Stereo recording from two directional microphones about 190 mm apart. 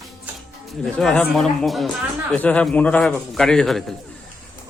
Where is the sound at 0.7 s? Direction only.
Centre (ahead or behind).